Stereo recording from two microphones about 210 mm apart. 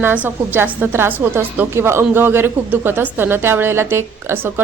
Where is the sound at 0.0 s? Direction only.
10° right (ahead or behind).